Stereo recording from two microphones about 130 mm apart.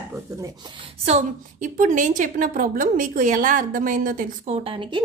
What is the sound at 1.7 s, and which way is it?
A woman's voice, 90° right.